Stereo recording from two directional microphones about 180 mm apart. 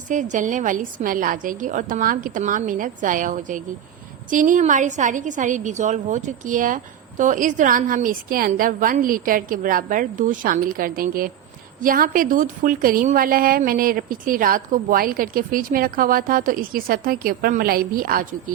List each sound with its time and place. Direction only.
0.1 s a woman's voice: 45° right (ahead or behind)